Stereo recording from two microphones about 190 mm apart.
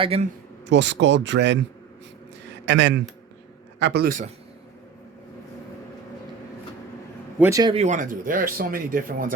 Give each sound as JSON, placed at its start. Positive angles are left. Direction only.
{"t": 0.0, "sound": "speech", "side_deg": -30}
{"t": 0.7, "sound": "speech", "side_deg": -70}
{"t": 2.6, "sound": "a man's voice", "side_deg": -70}
{"t": 7.3, "sound": "a man's voice", "side_deg": -10}
{"t": 7.6, "sound": "speech", "side_deg": -30}